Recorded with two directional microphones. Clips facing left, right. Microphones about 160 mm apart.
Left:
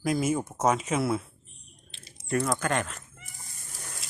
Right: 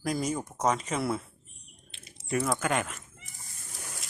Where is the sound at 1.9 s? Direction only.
35° left (ahead or behind).